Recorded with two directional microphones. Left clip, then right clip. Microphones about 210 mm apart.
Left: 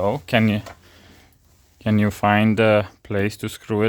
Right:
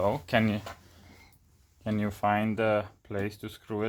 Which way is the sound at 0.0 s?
35° left (ahead or behind).